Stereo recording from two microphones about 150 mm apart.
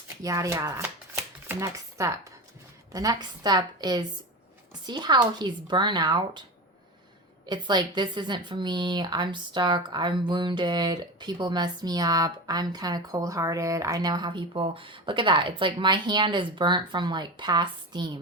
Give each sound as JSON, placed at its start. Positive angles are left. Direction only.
{"t": 0.2, "sound": "a woman's voice", "side_deg": -20}
{"t": 7.4, "sound": "a woman's voice", "side_deg": -30}